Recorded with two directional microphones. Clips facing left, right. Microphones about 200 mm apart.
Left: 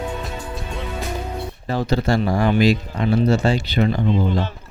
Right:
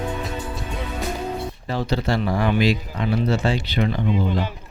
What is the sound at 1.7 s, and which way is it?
Speech, 45° left (ahead or behind).